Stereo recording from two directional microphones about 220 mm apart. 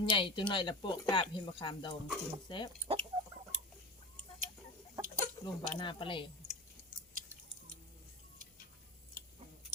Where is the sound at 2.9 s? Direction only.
25° right (ahead or behind).